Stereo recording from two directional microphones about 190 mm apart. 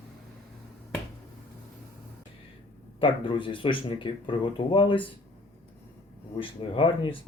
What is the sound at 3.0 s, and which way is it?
Speech, 25° left (ahead or behind).